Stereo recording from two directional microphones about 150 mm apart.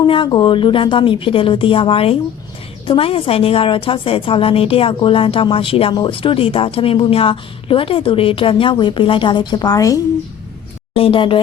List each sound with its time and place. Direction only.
0.0 s a woman's voice: 35° left (ahead or behind)
10.9 s a woman's voice: 35° left (ahead or behind)